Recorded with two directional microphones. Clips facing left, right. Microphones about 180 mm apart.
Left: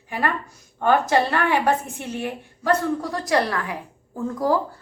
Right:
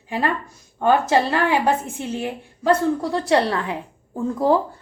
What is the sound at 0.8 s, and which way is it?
Speech, 20° right (ahead or behind).